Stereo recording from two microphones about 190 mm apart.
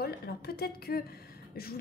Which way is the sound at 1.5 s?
50° left (ahead or behind).